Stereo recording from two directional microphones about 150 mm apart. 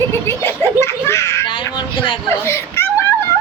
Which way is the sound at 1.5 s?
35° left (ahead or behind).